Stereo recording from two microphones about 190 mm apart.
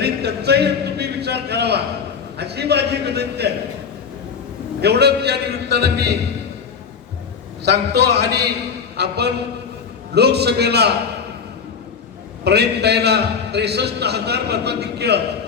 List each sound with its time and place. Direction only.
0.0 s a man's voice: 60° right (ahead or behind)
4.8 s a man's voice: 60° right (ahead or behind)
7.6 s a man's voice: 60° right (ahead or behind)
12.5 s a man's voice: 60° right (ahead or behind)